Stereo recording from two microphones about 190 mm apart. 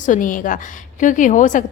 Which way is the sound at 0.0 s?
45° left (ahead or behind).